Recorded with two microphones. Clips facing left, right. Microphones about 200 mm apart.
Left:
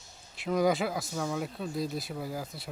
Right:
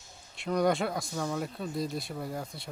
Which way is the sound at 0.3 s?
Centre (ahead or behind).